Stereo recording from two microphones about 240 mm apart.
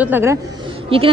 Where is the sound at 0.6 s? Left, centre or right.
Right.